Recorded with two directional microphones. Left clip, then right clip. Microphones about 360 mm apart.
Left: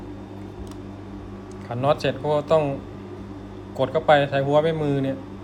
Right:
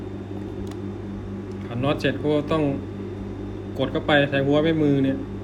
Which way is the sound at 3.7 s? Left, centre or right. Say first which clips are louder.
Left 3 dB; centre.